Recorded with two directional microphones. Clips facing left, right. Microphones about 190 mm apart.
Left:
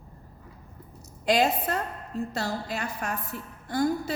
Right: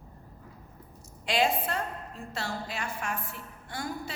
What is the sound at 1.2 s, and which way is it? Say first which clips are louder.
A woman's voice: left 4 dB; 40° left (ahead or behind).